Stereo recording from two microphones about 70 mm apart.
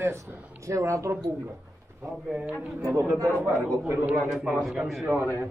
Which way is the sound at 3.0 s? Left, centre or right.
Right.